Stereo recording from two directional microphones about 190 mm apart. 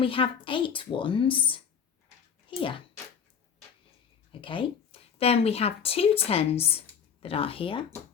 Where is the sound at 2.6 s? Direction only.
25° left (ahead or behind).